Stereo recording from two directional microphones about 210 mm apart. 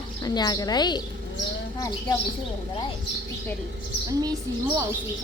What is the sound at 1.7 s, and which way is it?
Speech, 20° left (ahead or behind).